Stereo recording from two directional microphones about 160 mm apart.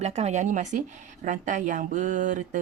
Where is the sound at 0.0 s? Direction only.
45° right (ahead or behind).